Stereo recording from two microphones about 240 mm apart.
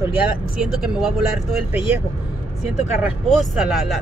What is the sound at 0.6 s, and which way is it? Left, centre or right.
Speech, centre.